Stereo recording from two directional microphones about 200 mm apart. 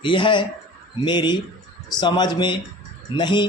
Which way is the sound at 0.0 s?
25° left (ahead or behind).